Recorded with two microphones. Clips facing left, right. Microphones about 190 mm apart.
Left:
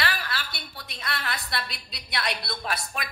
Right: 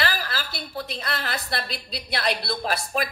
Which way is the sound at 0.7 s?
35° right (ahead or behind).